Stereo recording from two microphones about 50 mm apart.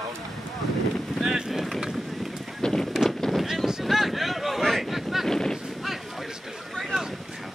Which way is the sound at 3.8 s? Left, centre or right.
Centre.